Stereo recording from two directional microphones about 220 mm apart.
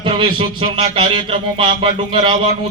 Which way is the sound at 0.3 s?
20° right (ahead or behind).